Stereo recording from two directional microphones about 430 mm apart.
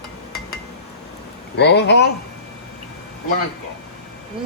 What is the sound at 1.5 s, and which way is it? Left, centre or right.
Speech, left.